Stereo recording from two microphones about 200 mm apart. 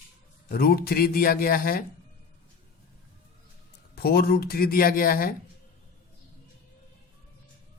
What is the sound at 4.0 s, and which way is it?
Speech, 50° left (ahead or behind).